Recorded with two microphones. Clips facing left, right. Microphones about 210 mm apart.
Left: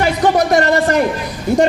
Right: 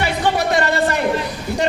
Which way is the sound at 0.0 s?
45° left (ahead or behind).